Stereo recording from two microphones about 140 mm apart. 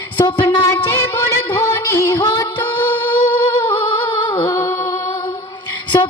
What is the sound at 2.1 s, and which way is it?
Music, 25° left (ahead or behind).